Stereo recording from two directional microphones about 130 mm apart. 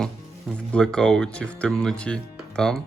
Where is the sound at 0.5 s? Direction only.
10° left (ahead or behind).